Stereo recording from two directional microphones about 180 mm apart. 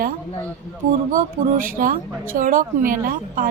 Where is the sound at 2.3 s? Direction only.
50° right (ahead or behind).